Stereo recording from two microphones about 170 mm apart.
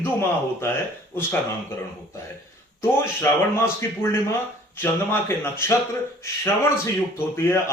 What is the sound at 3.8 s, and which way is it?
A man's voice, 15° left (ahead or behind).